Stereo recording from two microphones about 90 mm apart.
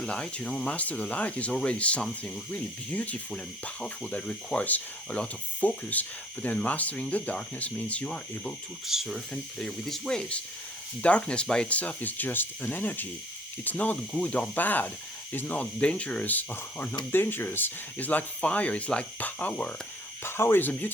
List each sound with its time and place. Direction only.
0.0 s speech: 10° left (ahead or behind)
8.9 s speech: 5° right (ahead or behind); by 20.9 s 20° left (ahead or behind)